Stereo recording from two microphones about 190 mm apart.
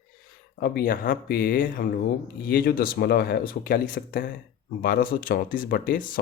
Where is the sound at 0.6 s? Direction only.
50° left (ahead or behind).